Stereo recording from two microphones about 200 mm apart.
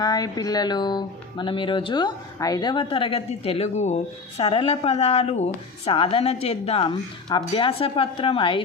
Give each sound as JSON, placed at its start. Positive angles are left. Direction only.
{"t": 0.0, "sound": "speech", "side_deg": 20}